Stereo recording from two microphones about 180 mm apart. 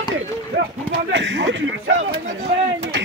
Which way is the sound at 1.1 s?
85° right.